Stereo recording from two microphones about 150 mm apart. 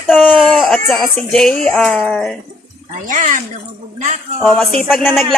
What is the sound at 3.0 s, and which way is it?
Speech, 60° right (ahead or behind).